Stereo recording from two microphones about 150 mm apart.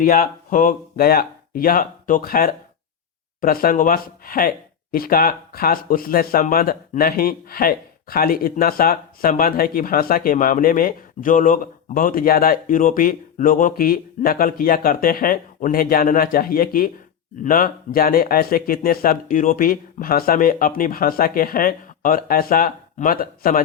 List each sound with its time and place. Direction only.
0.0 s speech: 65° left (ahead or behind)